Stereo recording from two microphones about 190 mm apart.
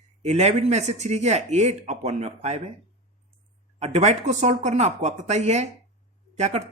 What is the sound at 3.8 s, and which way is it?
Speech, 35° right (ahead or behind).